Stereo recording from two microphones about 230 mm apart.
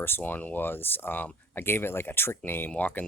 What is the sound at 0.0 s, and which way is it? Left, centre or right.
Speech, centre.